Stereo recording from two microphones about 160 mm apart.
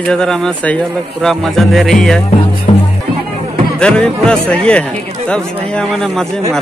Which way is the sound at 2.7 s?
35° left (ahead or behind).